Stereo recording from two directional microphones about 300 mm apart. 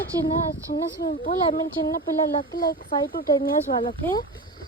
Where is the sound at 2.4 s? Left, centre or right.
Centre.